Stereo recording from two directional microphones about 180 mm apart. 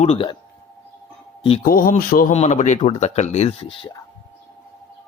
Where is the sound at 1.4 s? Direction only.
30° left (ahead or behind).